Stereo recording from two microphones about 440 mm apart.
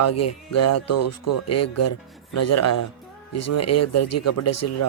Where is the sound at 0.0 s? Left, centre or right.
Left.